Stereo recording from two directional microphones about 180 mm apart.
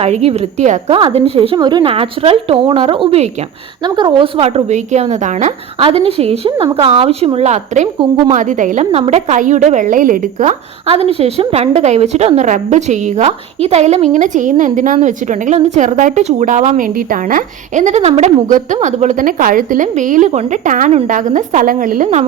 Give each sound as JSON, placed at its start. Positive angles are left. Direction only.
{"t": 0.0, "sound": "a woman's voice", "side_deg": -35}
{"t": 10.8, "sound": "a woman's voice", "side_deg": -35}